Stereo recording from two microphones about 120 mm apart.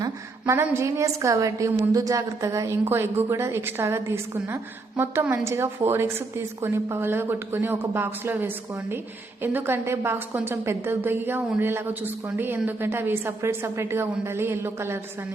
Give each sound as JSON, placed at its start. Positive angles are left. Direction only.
{"t": 0.0, "sound": "a woman's voice", "side_deg": -25}